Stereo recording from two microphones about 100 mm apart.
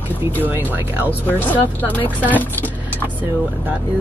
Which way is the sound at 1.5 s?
15° left (ahead or behind).